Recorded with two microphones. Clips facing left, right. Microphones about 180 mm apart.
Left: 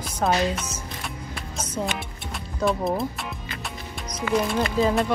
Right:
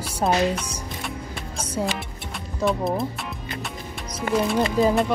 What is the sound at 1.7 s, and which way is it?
Music, centre (ahead or behind).